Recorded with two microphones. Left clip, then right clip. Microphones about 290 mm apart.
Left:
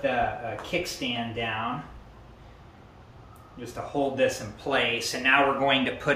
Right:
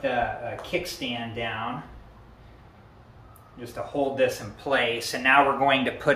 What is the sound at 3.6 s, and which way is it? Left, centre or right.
Speech, centre.